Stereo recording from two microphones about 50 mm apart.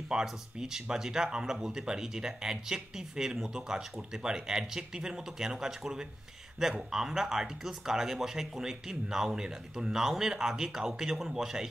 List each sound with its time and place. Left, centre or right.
0.1 s speech: centre